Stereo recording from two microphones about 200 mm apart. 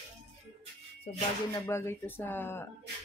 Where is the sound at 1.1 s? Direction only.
30° left (ahead or behind).